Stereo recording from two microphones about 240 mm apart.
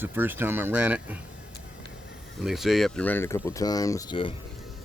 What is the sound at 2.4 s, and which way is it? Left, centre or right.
Speech, centre.